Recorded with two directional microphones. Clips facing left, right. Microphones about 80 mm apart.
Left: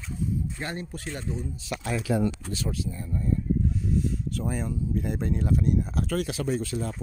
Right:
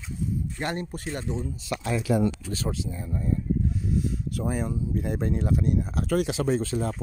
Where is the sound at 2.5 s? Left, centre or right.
Right.